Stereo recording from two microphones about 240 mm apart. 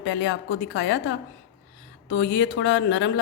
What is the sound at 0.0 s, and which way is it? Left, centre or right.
Speech, left.